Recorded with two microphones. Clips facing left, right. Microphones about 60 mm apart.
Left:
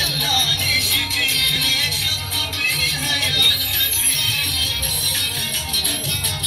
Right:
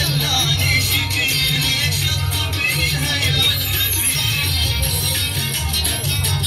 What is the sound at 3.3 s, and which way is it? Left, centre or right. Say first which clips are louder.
Music: left 2 dB; right.